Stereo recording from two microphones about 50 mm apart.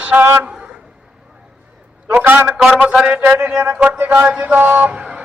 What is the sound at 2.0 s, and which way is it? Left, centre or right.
Speech, right.